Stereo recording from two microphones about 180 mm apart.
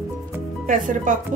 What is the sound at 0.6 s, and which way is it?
Speech, 45° right (ahead or behind).